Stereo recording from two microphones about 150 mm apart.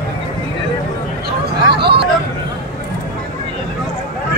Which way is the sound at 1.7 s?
90° right.